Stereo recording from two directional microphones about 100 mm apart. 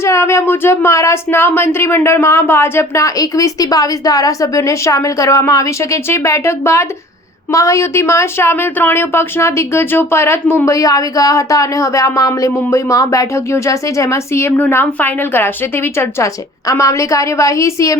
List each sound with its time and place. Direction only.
0.0 s speech: 25° left (ahead or behind)